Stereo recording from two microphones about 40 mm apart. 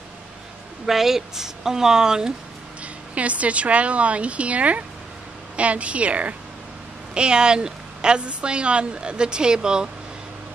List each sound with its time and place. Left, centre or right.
0.8 s speech: centre
2.8 s a woman's voice: right
7.2 s speech: right